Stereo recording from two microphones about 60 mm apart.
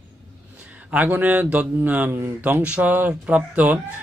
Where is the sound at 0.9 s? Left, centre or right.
Right.